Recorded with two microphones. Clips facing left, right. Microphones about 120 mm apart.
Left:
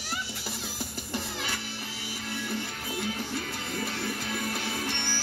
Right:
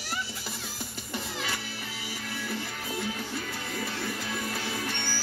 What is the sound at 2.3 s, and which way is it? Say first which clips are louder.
Music: left 2 dB; 25° left (ahead or behind).